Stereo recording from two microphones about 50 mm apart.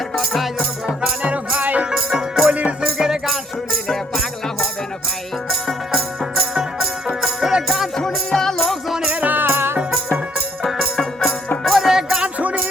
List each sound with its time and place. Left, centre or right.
0.2 s music: centre
1.2 s music: right
1.9 s music: centre
2.5 s music: right
2.8 s music: centre
3.7 s music: centre
6.5 s music: centre
7.9 s music: centre
9.0 s music: right
10.6 s music: centre
11.2 s music: left
11.6 s music: centre
12.2 s music: right